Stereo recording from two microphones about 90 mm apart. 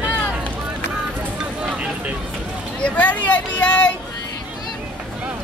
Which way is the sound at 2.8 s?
15° left (ahead or behind).